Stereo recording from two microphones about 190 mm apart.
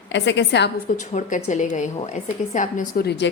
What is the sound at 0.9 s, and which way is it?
A woman's voice, 40° left (ahead or behind).